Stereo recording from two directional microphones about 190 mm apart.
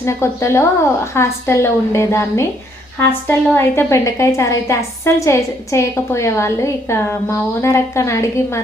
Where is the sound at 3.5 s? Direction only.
15° left (ahead or behind).